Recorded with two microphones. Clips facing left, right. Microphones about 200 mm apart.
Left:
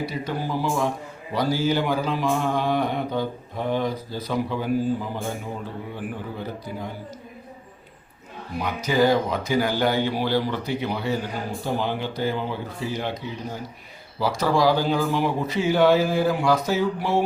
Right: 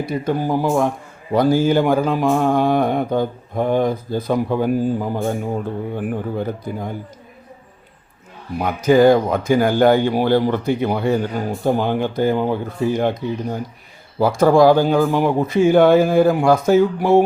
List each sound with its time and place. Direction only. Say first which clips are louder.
0.0 s speech: right 7 dB; 50° right (ahead or behind)
8.5 s speech: right 8 dB; 50° right (ahead or behind)